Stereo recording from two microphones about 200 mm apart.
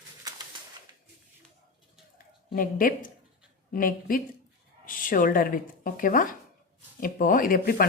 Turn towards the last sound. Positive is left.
turn(degrees=45)  # may be behind; listen again after turning